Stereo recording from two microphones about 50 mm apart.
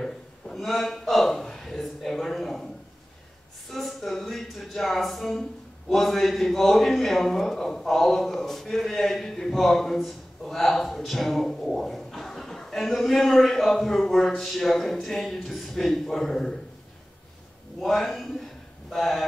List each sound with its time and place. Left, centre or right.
0.0 s a man's voice: centre
3.7 s speech: centre
17.7 s speech: centre